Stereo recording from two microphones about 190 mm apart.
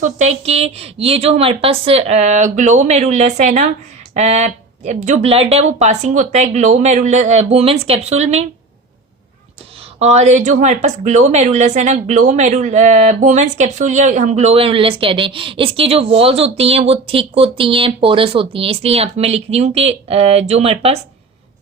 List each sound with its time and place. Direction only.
0.0 s speech: 35° right (ahead or behind)
10.0 s speech: 35° right (ahead or behind)